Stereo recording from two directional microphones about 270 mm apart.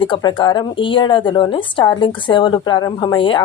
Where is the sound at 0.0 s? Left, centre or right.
Centre.